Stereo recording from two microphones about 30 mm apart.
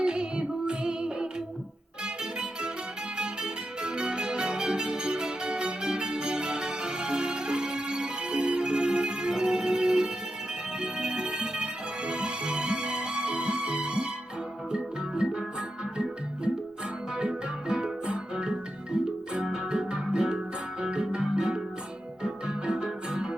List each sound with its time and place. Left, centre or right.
0.0 s music: right
2.4 s guitar: right
3.4 s music: right
14.7 s organ: right
17.2 s music: right